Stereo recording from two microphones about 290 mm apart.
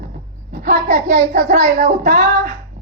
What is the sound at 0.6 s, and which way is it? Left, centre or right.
A woman's voice, right.